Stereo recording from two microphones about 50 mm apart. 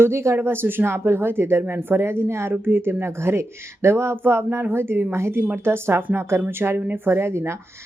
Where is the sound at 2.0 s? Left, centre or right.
Right.